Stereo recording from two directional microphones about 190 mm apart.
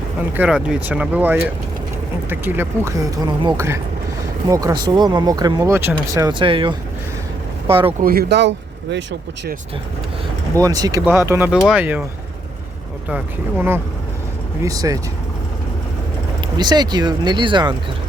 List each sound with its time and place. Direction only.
0.3 s speech: 5° right (ahead or behind); by 7.9 s 30° right (ahead or behind)
8.0 s speech: 55° right (ahead or behind); by 9.0 s 70° right (ahead or behind)
10.6 s speech: 20° right (ahead or behind)
13.1 s speech: 10° right (ahead or behind)
16.6 s speech: 20° right (ahead or behind)